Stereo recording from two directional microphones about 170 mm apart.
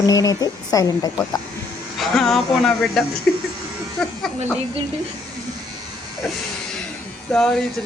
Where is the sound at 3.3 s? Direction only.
5° left (ahead or behind).